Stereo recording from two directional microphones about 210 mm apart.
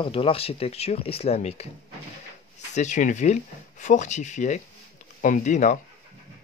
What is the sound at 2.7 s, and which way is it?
Speech, 35° left (ahead or behind).